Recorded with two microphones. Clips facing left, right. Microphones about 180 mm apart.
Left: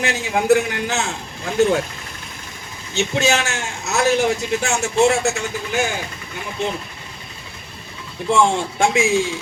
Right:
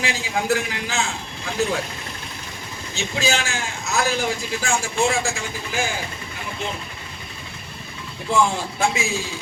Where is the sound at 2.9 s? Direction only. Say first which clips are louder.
Left 5 dB; 70° left (ahead or behind).